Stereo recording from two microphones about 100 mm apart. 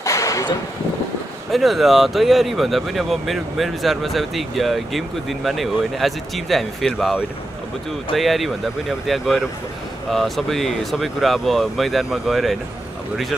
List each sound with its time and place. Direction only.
0.0 s a sound: 35° left (ahead or behind)
1.5 s speech: centre (ahead or behind)
8.2 s speech: centre (ahead or behind)